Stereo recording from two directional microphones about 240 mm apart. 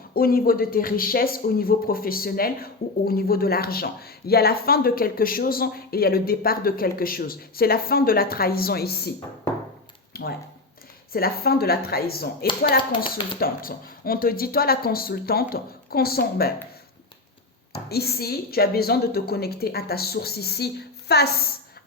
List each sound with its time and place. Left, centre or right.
0.1 s speech: left
10.1 s a sound: left
11.1 s speech: left
17.7 s speech: left